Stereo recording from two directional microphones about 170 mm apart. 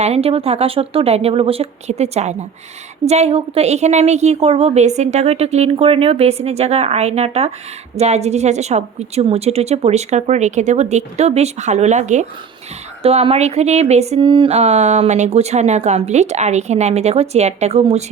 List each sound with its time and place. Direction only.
0.0 s speech: 35° right (ahead or behind)